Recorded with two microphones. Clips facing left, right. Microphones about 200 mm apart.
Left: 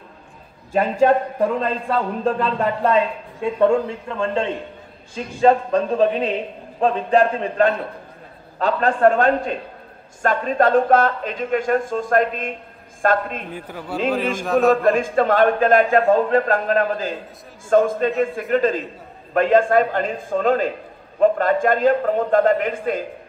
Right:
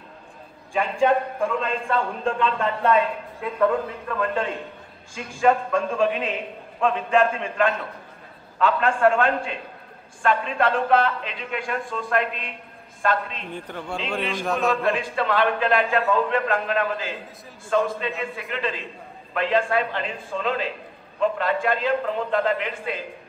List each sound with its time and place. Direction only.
0.7 s a man's voice: 40° left (ahead or behind)
13.5 s a man's voice: 5° left (ahead or behind)
14.7 s a man's voice: 45° left (ahead or behind)